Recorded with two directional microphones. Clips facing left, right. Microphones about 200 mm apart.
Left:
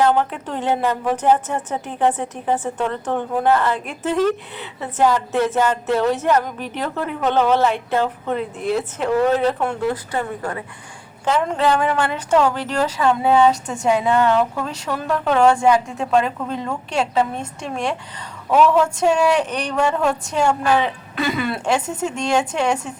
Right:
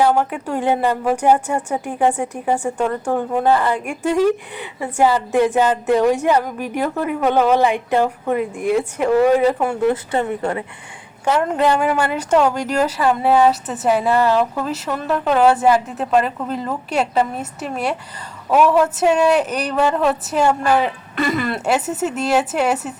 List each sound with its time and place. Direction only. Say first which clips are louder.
0.0 s speech: right 1 dB; 10° right (ahead or behind)
9.8 s a woman's voice: right 4 dB; 25° right (ahead or behind)
11.4 s speech: right 1 dB; 10° right (ahead or behind)